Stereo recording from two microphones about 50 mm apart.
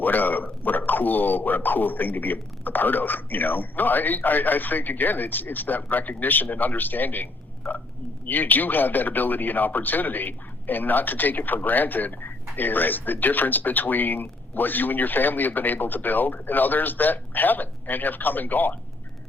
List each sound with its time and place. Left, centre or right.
0.0 s speech: left